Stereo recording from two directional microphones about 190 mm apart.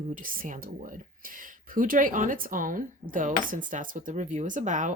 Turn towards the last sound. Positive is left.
turn(degrees=-40)  # may be behind; listen again after turning